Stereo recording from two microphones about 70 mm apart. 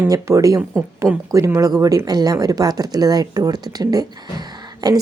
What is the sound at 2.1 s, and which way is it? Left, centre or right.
A woman's voice, right.